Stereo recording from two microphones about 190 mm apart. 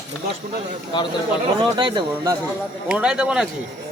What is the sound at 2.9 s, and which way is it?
Speech, 5° right (ahead or behind).